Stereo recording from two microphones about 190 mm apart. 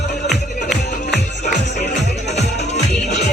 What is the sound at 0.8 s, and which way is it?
Music, 40° left (ahead or behind).